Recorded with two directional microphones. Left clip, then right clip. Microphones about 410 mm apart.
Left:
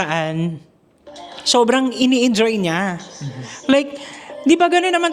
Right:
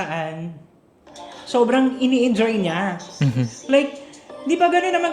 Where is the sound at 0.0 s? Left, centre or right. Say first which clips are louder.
Left 5 dB; left.